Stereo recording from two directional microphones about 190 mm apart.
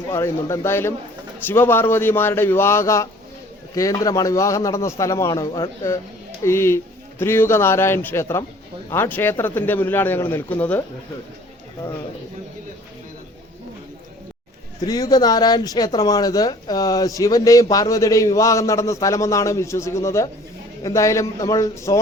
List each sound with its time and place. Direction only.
0.1 s speech: 15° left (ahead or behind)
14.8 s speech: 20° left (ahead or behind)